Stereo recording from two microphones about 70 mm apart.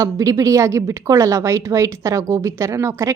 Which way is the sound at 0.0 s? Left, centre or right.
Right.